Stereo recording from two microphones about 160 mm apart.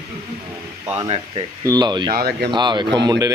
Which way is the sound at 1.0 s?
30° right (ahead or behind).